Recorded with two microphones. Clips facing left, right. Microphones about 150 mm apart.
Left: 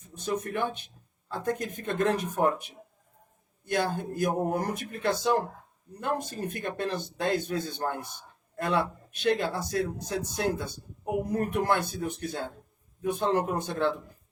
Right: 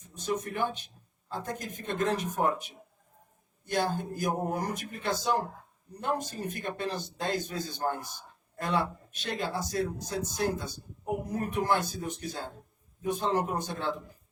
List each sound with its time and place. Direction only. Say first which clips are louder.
0.2 s a man's voice: left 1 dB; 60° left (ahead or behind)